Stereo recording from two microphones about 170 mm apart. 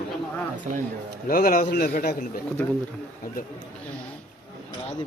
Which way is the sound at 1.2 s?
55° left (ahead or behind).